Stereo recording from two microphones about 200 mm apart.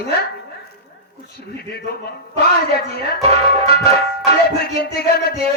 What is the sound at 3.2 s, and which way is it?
Speech, 30° right (ahead or behind).